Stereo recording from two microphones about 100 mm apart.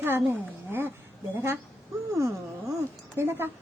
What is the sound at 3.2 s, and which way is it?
Speech, 25° right (ahead or behind).